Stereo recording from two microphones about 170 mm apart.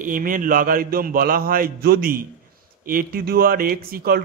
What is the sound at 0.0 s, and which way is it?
A man's voice, 50° right (ahead or behind).